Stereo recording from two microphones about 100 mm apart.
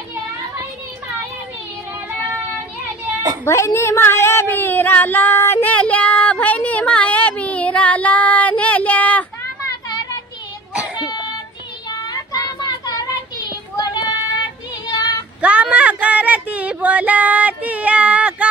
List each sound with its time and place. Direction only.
3.4 s speech: 30° left (ahead or behind)
5.7 s a sound: 15° left (ahead or behind)
9.7 s children playing: 40° left (ahead or behind)
10.7 s baby cry: 10° right (ahead or behind)
11.1 s child singing: 45° left (ahead or behind)
15.4 s a sound: 10° right (ahead or behind)